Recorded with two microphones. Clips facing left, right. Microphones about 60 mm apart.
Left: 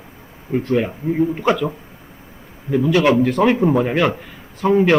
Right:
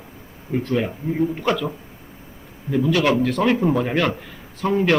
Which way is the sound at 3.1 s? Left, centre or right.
Centre.